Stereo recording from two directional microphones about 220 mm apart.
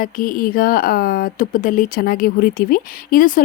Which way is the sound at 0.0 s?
40° left (ahead or behind).